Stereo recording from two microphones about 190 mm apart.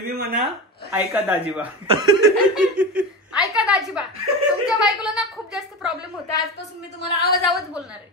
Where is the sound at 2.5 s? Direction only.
5° right (ahead or behind).